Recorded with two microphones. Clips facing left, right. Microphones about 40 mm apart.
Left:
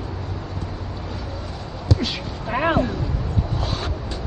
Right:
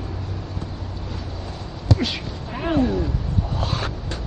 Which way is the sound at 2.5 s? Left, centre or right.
Left.